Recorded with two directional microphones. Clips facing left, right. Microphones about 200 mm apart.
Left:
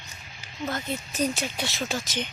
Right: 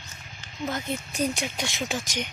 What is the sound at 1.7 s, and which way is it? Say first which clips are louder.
Speech: even; 15° right (ahead or behind).